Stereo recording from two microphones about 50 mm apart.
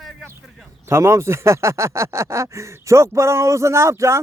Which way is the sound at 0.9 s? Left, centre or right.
Right.